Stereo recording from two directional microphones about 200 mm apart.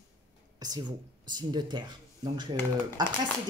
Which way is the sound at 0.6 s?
20° right (ahead or behind).